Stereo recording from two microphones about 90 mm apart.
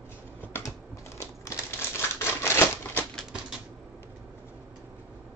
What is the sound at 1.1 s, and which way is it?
Typewriter, 35° left (ahead or behind).